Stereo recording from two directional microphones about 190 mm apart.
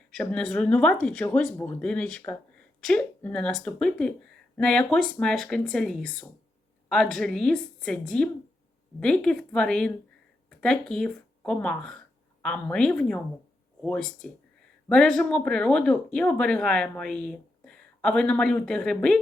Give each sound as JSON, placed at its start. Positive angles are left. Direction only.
{"t": 0.2, "sound": "speech", "side_deg": 5}
{"t": 14.2, "sound": "speech", "side_deg": 5}